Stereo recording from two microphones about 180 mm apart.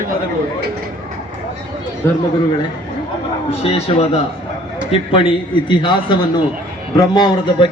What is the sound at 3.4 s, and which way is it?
A man's voice, 35° left (ahead or behind).